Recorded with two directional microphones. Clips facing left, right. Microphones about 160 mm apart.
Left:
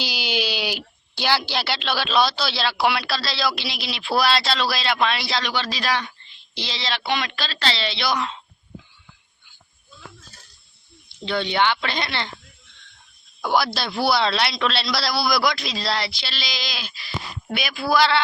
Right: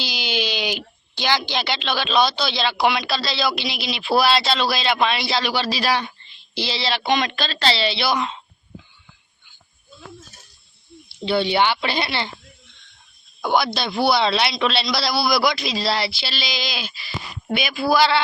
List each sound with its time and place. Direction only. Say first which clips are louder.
0.0 s speech: even; 10° left (ahead or behind); by 7.6 s 20° right (ahead or behind)
7.9 s speech: right 3 dB; 5° right (ahead or behind)
11.3 s speech: right 3 dB; 10° right (ahead or behind)
13.4 s speech: right 1 dB; 5° left (ahead or behind)